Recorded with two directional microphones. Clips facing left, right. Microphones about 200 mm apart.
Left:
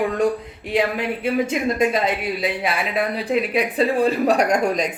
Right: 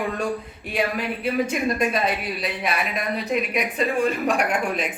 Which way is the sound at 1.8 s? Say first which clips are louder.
Left 3 dB; 25° left (ahead or behind).